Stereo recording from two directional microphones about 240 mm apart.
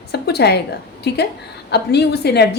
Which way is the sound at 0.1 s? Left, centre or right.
Left.